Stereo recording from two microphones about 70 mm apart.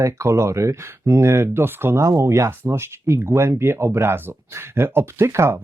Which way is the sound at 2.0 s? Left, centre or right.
Right.